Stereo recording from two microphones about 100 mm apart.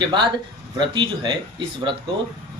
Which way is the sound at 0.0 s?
50° right (ahead or behind).